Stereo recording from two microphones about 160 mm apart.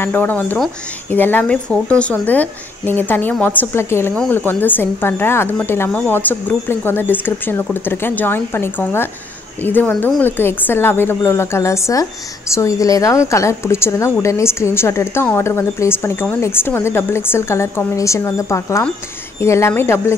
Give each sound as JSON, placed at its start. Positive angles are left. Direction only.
{"t": 0.0, "sound": "a woman's voice", "side_deg": 10}